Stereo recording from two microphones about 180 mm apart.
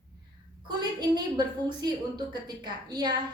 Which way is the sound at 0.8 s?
25° right (ahead or behind).